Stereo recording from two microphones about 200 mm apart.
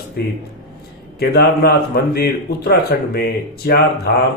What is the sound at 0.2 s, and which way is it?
Speech, 50° left (ahead or behind).